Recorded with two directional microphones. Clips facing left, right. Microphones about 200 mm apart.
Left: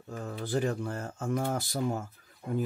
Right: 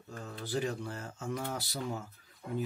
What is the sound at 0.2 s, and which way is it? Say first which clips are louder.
Speech: left 4 dB; 50° left (ahead or behind).